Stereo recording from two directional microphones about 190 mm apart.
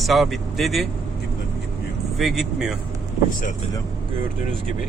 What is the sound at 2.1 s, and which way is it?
Vehicle, centre (ahead or behind).